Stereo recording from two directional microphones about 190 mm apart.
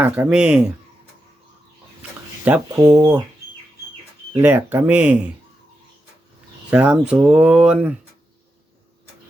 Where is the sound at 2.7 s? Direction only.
20° right (ahead or behind).